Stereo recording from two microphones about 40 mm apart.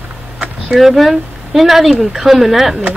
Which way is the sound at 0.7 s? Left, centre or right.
Centre.